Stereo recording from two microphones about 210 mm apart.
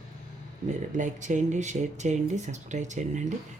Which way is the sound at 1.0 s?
35° right (ahead or behind).